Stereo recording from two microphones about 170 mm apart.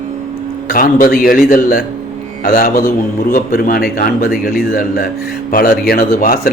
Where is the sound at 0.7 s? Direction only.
55° left (ahead or behind).